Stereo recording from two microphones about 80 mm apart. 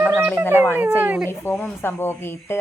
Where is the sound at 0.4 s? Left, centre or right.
Left.